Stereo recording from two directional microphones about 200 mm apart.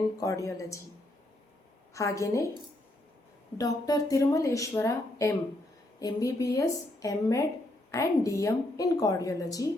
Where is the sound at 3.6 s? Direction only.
15° left (ahead or behind).